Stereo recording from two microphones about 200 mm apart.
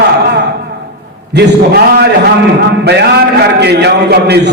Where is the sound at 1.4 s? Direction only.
55° right (ahead or behind).